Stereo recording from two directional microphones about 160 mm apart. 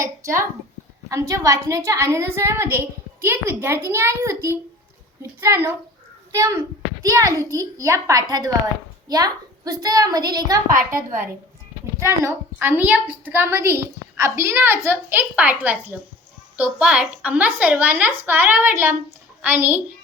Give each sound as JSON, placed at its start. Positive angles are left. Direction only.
{"t": 0.0, "sound": "a woman's voice", "side_deg": -20}
{"t": 11.9, "sound": "a woman's voice", "side_deg": -15}